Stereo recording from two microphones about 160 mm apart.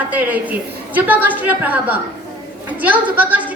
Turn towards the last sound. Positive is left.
turn(degrees=-10)  # may be behind; listen again after turning